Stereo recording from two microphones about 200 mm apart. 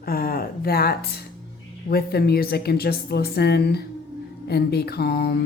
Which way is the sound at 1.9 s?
50° left (ahead or behind).